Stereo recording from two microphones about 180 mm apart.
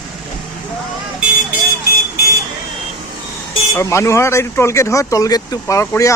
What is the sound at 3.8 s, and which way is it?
Speech, 15° left (ahead or behind).